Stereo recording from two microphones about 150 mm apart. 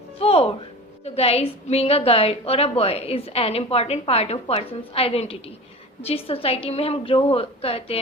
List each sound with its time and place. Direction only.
0.2 s a woman's voice: 40° left (ahead or behind)